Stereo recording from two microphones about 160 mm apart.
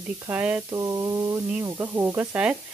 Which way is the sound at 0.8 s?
20° right (ahead or behind).